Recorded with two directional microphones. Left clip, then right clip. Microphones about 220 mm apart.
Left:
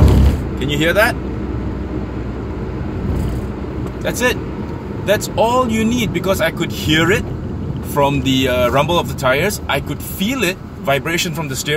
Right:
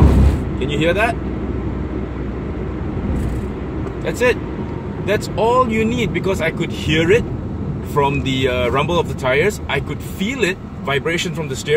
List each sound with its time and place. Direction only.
0.6 s speech: 20° left (ahead or behind)
4.0 s speech: 20° left (ahead or behind)